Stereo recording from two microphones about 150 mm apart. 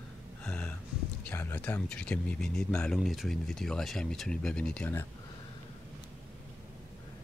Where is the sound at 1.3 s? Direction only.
15° left (ahead or behind).